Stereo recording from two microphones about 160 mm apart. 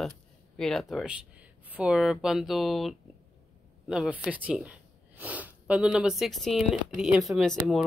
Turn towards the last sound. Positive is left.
turn(degrees=0)  # may be behind; listen again after turning